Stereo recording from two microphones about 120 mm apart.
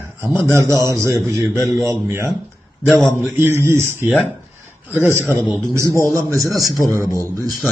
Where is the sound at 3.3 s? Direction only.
20° right (ahead or behind).